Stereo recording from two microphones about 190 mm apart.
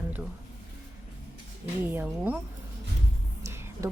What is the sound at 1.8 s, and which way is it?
Speech, 10° right (ahead or behind).